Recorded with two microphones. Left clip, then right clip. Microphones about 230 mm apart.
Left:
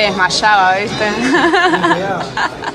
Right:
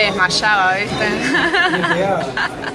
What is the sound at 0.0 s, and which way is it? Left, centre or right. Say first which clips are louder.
A woman's voice: left 3 dB; centre.